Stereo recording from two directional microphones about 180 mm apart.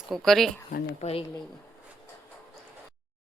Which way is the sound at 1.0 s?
40° left (ahead or behind).